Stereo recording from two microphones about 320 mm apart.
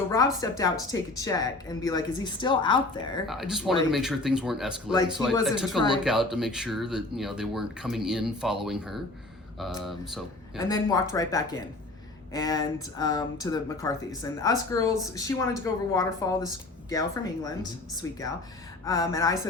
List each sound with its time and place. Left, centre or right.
0.1 s speech: centre
3.2 s speech: centre
10.6 s speech: centre